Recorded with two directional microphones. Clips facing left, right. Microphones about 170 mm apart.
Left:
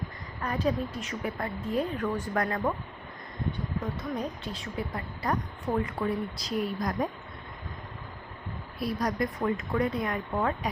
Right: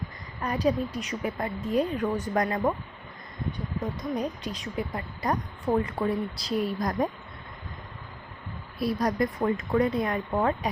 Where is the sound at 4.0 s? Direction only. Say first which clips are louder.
Right 3 dB; 15° right (ahead or behind).